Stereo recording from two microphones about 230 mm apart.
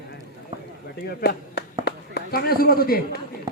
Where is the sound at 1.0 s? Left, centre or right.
Left.